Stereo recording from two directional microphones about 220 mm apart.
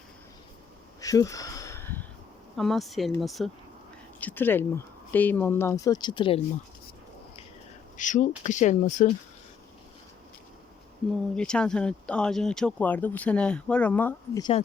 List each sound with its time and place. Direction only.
1.0 s a sound: 15° left (ahead or behind)
2.6 s speech: centre (ahead or behind); by 6.4 s 25° left (ahead or behind)
7.9 s speech: 35° left (ahead or behind)
11.3 s speech: 5° left (ahead or behind)